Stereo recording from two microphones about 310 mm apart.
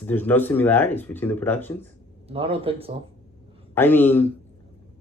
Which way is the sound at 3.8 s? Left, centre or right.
Centre.